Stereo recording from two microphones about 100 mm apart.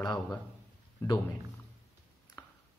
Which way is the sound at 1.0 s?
30° left (ahead or behind).